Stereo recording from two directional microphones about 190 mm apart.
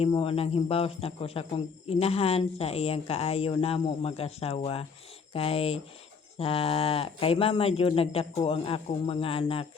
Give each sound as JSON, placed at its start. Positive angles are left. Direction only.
{"t": 0.1, "sound": "speech", "side_deg": 30}